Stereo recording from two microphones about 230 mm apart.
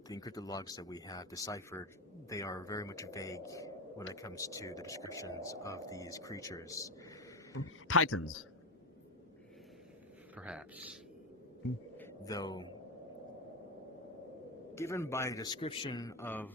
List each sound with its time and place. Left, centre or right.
0.1 s speech: centre
7.5 s speech: left
10.3 s speech: centre
11.9 s a sound: centre
14.8 s speech: centre